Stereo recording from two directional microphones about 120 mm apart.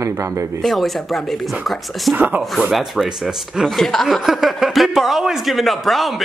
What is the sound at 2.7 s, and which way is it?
Speech, centre (ahead or behind).